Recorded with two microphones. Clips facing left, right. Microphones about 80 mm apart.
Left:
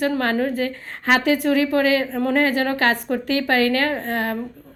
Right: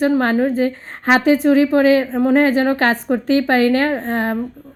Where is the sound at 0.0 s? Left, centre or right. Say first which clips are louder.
Right 5 dB; right.